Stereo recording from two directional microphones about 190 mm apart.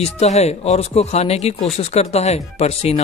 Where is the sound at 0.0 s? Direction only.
35° left (ahead or behind).